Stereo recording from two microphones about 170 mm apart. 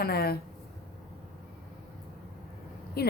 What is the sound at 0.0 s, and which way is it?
Speech, 65° left (ahead or behind).